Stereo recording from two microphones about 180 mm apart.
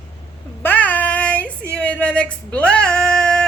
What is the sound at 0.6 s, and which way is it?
A woman's voice, 10° left (ahead or behind).